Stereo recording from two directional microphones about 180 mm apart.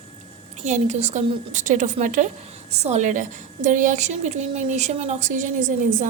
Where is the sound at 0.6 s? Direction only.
40° right (ahead or behind).